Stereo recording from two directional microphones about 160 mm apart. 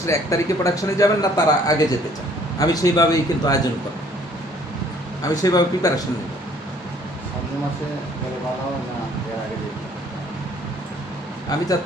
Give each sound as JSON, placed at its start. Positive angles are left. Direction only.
{"t": 0.0, "sound": "speech", "side_deg": 20}
{"t": 5.2, "sound": "speech", "side_deg": 20}